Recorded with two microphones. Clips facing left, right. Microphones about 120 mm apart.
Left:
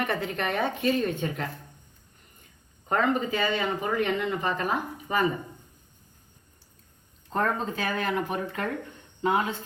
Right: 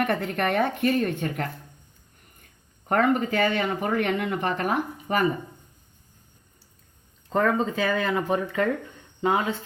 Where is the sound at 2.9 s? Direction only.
60° right (ahead or behind).